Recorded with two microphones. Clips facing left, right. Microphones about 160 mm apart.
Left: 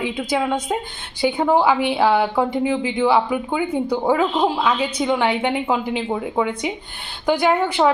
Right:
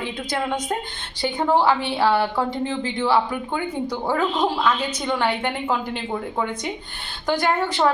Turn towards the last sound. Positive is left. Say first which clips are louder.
# left 3 dB
turn(degrees=10)  # may be behind; listen again after turning